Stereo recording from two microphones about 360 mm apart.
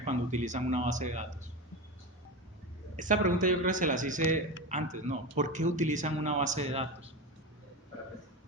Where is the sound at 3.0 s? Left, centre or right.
Right.